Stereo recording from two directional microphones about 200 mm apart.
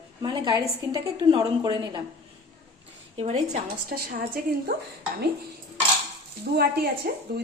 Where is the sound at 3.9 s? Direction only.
45° right (ahead or behind).